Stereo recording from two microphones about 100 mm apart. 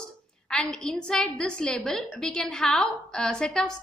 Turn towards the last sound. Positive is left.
turn(degrees=5)  # may be behind; listen again after turning